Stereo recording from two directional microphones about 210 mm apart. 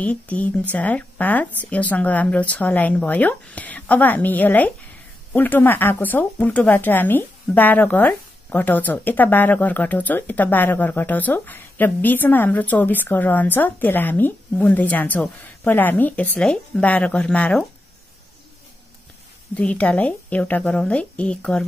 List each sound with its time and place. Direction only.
0.0 s speech: 5° left (ahead or behind)
19.5 s a woman's voice: 5° left (ahead or behind)